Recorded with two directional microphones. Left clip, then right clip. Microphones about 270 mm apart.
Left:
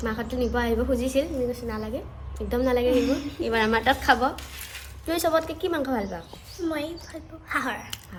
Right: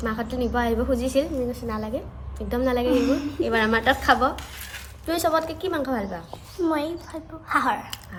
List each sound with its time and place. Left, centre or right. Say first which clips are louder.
0.0 s a woman's voice: right 1 dB; centre
2.9 s a woman's voice: right 2 dB; centre
3.5 s a woman's voice: right 1 dB; centre
6.7 s a woman's voice: right 4 dB; centre